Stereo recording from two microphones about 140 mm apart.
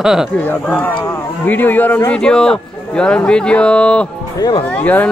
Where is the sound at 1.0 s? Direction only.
15° left (ahead or behind).